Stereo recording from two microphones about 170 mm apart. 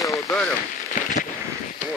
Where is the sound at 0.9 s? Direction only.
50° left (ahead or behind).